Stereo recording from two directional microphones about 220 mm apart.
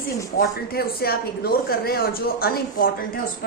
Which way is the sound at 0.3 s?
45° left (ahead or behind).